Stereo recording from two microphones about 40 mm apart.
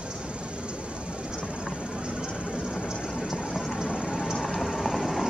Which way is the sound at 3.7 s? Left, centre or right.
Right.